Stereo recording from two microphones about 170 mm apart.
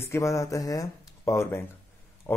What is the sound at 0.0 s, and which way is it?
Speech, 15° left (ahead or behind).